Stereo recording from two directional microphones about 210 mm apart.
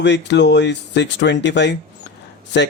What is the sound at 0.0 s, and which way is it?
Speech, 55° left (ahead or behind).